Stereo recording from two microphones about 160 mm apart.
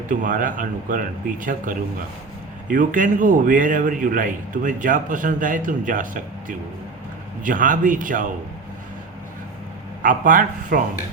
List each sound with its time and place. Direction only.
0.1 s a man's voice: 55° right (ahead or behind)
10.0 s a man's voice: 55° right (ahead or behind)